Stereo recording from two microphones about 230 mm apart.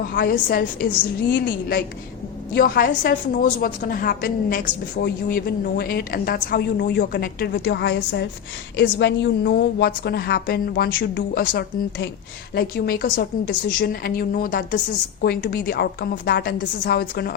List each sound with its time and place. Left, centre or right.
0.1 s a woman's voice: left
2.6 s a woman's voice: left